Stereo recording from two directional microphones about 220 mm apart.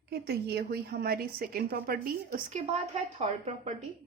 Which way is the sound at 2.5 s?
30° right (ahead or behind).